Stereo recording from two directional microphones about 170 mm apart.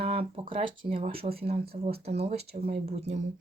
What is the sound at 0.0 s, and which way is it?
Speech, 35° right (ahead or behind).